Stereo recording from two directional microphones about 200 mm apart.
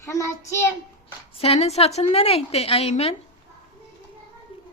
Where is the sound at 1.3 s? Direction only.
30° left (ahead or behind).